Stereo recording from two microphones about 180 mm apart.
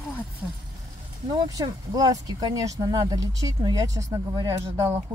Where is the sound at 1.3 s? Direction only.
20° right (ahead or behind).